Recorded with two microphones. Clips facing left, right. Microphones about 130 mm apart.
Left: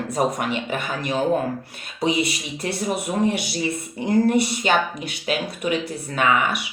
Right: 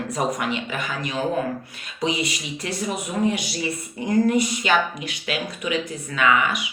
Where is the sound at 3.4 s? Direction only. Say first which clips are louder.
Left 2 dB; 30° left (ahead or behind).